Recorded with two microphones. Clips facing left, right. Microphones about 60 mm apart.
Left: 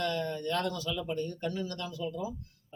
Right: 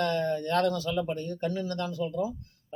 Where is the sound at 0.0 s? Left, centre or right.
Right.